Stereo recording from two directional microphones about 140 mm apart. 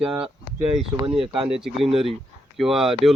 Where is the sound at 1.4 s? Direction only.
5° right (ahead or behind).